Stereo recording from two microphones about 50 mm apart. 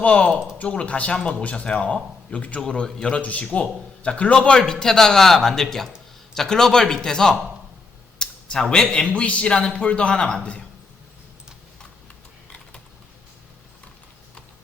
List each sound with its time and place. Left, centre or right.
0.0 s speech: left
3.2 s a man's voice: left; by 7.3 s centre
8.2 s a sound: centre
8.7 s speech: centre